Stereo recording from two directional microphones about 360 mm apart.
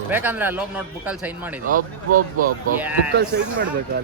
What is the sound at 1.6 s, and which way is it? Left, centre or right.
Speech, right.